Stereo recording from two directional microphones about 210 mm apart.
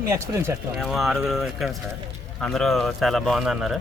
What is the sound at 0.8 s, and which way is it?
Speech, centre (ahead or behind).